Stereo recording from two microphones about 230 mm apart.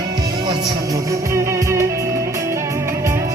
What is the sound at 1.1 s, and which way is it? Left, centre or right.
Music, centre.